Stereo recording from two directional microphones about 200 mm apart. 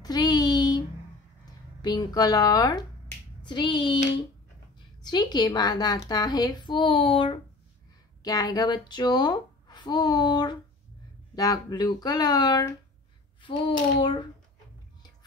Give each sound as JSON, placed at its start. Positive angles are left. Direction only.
{"t": 0.0, "sound": "a sound", "side_deg": 20}
{"t": 1.8, "sound": "speech", "side_deg": 20}
{"t": 5.0, "sound": "speech", "side_deg": 20}